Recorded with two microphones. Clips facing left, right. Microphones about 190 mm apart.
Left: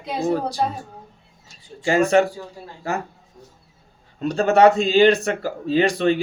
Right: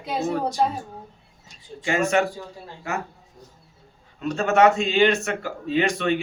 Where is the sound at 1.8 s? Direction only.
35° left (ahead or behind).